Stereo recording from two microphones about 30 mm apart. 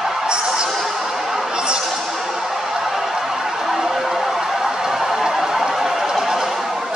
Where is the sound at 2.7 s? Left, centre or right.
Centre.